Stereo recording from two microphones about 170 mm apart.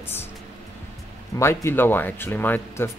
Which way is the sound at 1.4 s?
15° left (ahead or behind).